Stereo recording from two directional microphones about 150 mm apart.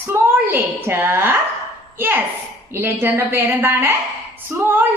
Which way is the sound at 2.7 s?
15° right (ahead or behind).